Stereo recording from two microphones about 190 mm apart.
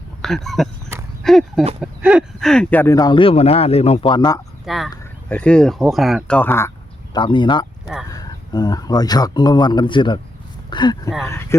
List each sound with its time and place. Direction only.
0.2 s speech: centre (ahead or behind); by 4.4 s 25° left (ahead or behind)
4.6 s speech: centre (ahead or behind)
7.1 s speech: 25° left (ahead or behind)